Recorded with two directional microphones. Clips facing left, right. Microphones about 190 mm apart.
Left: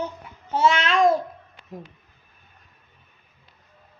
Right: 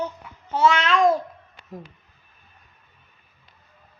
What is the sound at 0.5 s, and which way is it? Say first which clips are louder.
Babbling: right 1 dB; 25° left (ahead or behind).